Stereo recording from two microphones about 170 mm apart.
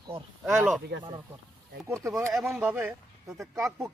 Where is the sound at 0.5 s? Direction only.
10° right (ahead or behind).